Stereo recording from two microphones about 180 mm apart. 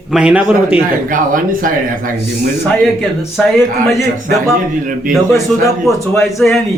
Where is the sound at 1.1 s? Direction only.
50° right (ahead or behind).